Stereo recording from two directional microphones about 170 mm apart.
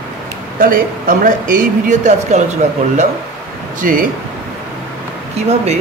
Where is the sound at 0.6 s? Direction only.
55° right (ahead or behind).